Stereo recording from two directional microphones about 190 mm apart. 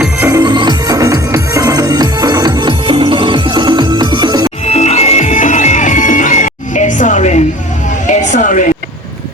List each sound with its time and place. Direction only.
0.0 s music: 15° right (ahead or behind)
4.6 s music: 35° left (ahead or behind)
8.0 s a sound: 40° left (ahead or behind)